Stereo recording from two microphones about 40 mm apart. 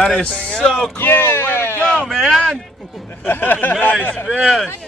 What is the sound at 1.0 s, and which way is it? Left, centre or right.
Speech, left.